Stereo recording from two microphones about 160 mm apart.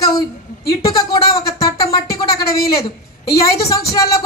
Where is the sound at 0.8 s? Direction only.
25° left (ahead or behind).